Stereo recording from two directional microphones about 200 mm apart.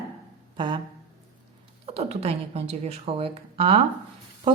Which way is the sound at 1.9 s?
30° right (ahead or behind).